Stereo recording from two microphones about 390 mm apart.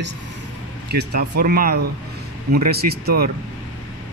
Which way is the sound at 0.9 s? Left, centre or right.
Right.